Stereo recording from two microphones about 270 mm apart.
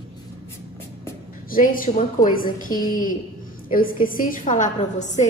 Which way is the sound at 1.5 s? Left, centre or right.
Left.